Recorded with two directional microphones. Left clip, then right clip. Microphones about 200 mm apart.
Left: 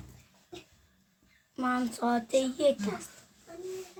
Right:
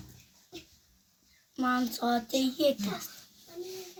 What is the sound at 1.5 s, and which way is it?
Speech, 25° left (ahead or behind).